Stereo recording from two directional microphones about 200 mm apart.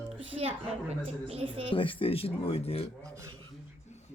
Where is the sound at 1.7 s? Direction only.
25° left (ahead or behind).